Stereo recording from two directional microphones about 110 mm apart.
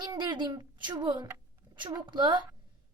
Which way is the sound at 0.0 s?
45° right (ahead or behind).